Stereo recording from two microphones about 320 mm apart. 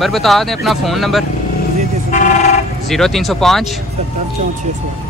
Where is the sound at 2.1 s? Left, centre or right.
Left.